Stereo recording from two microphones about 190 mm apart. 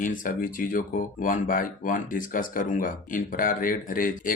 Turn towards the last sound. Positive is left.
turn(degrees=45)  # may be behind; listen again after turning